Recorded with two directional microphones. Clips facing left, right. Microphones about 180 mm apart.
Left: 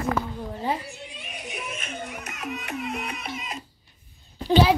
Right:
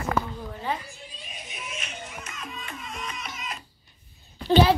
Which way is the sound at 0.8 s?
75° left (ahead or behind).